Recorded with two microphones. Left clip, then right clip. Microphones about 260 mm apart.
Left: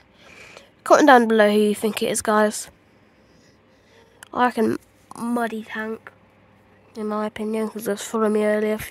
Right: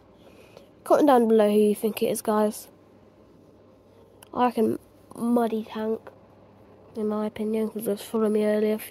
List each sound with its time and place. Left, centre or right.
0.2 s a sound: left
2.0 s speech: left
4.2 s speech: left